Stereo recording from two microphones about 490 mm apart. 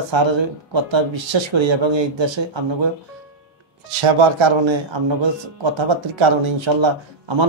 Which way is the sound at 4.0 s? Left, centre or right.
Right.